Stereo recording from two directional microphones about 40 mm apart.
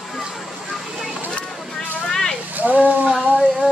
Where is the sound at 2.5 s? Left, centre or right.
Right.